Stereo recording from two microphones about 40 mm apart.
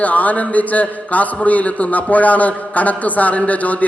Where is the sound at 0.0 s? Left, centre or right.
Left.